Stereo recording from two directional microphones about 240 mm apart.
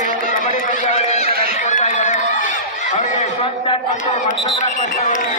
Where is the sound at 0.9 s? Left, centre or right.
Left.